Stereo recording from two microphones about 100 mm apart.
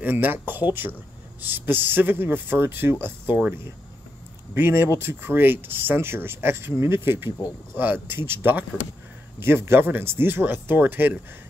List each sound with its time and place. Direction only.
0.0 s speech: 20° right (ahead or behind)